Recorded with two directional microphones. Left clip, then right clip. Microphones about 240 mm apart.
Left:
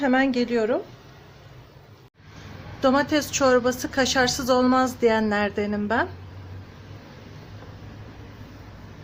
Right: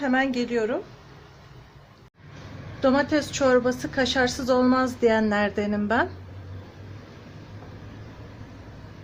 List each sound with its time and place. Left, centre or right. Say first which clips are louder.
0.0 s a woman's voice: left 2 dB; centre
2.8 s a woman's voice: left 1 dB; centre